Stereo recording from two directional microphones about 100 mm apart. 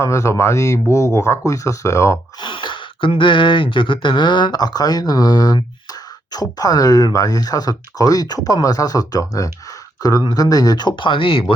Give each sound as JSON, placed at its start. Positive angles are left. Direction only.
{"t": 0.0, "sound": "speech", "side_deg": 30}
{"t": 2.4, "sound": "speech", "side_deg": 55}